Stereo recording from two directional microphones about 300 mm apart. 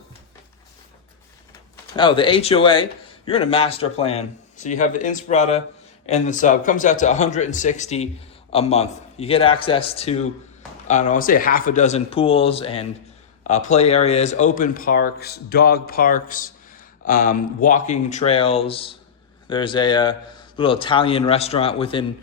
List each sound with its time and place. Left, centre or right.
1.7 s a man's voice: centre